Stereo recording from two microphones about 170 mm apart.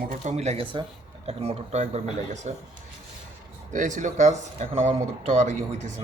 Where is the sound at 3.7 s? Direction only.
45° right (ahead or behind).